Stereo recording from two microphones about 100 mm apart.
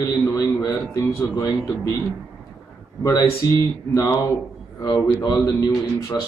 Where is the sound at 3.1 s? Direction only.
35° left (ahead or behind).